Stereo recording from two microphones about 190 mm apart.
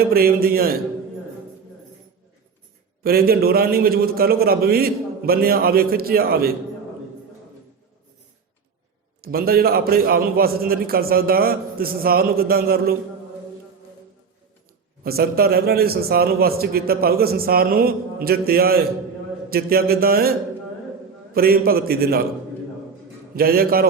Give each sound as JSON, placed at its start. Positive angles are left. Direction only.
{"t": 0.0, "sound": "a man's voice", "side_deg": -55}
{"t": 3.0, "sound": "a man's voice", "side_deg": -55}
{"t": 9.2, "sound": "a man's voice", "side_deg": -50}
{"t": 15.0, "sound": "a man's voice", "side_deg": -55}
{"t": 21.3, "sound": "a man's voice", "side_deg": -50}
{"t": 23.3, "sound": "a man's voice", "side_deg": -50}